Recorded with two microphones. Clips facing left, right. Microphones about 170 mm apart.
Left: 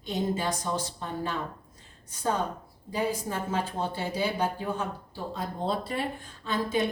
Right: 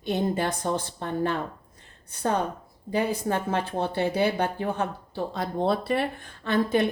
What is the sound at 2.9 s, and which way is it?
Speech, 65° right (ahead or behind).